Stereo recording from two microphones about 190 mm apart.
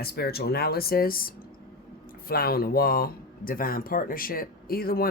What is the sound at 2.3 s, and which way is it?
Speech, 55° left (ahead or behind).